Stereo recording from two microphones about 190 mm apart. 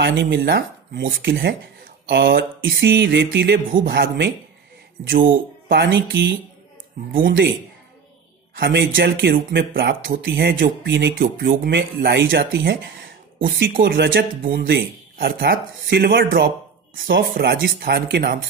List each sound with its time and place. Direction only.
0.0 s speech: 60° right (ahead or behind)
2.6 s music: 70° right (ahead or behind)
3.7 s speech: 50° right (ahead or behind)
5.9 s speech: 80° right
7.1 s speech: 50° right (ahead or behind)
8.5 s speech: 50° right (ahead or behind)
8.9 s speech: 70° right (ahead or behind); by 10.2 s 50° right (ahead or behind)
10.2 s music: 70° right (ahead or behind)
11.2 s speech: 50° right (ahead or behind)